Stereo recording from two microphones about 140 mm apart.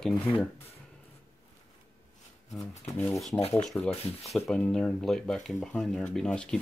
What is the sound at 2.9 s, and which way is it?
Speech, 20° left (ahead or behind).